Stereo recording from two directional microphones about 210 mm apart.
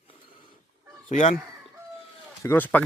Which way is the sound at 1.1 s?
35° left (ahead or behind).